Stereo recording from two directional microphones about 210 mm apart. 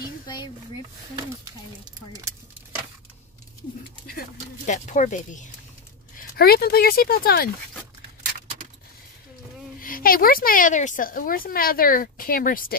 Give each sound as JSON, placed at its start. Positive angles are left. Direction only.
{"t": 4.1, "sound": "speech", "side_deg": 40}
{"t": 9.8, "sound": "speech", "side_deg": 40}